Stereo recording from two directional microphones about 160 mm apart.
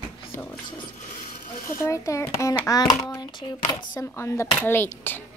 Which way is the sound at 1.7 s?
20° left (ahead or behind).